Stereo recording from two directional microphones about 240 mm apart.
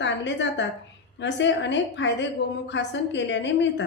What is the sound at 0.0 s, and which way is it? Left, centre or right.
A woman's voice, left.